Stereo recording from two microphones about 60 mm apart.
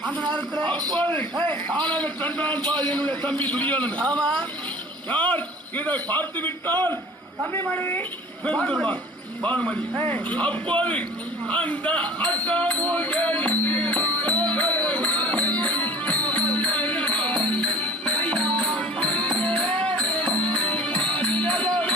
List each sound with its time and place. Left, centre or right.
0.6 s a man's voice: left
8.4 s a man's voice: centre
11.5 s music: left